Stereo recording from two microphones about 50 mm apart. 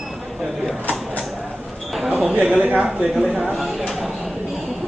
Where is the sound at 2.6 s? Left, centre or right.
Right.